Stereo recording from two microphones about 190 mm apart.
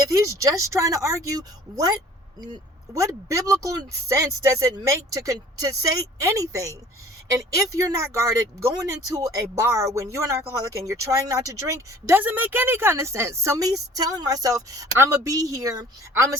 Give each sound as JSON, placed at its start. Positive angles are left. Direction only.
{"t": 0.0, "sound": "speech", "side_deg": -15}